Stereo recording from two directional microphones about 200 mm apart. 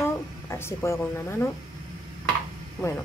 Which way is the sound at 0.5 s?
15° left (ahead or behind).